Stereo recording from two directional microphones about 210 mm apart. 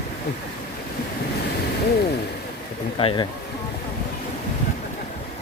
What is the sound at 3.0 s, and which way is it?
Speech, 25° left (ahead or behind).